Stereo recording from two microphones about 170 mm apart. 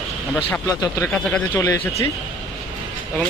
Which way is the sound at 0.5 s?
20° left (ahead or behind).